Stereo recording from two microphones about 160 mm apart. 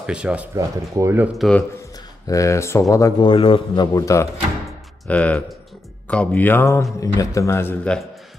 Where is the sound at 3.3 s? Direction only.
30° left (ahead or behind).